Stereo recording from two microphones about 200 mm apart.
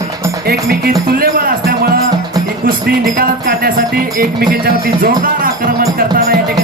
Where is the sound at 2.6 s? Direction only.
50° right (ahead or behind).